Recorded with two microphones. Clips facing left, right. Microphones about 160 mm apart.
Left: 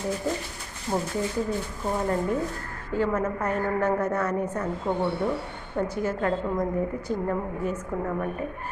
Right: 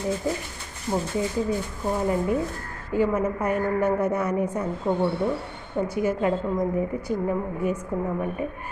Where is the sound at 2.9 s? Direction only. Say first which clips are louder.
Right 3 dB; 10° right (ahead or behind).